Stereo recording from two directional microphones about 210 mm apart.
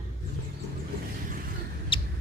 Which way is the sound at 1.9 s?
25° left (ahead or behind).